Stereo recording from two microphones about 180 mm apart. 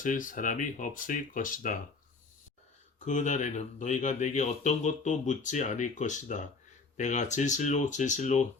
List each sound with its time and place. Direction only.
0.0 s speech: 50° left (ahead or behind)
3.1 s speech: 40° left (ahead or behind)